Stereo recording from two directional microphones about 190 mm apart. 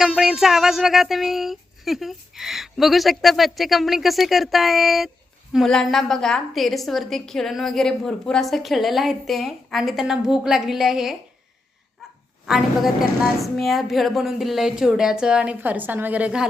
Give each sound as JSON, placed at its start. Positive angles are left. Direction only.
{"t": 0.0, "sound": "a woman's voice", "side_deg": -5}
{"t": 12.5, "sound": "a woman's voice", "side_deg": 0}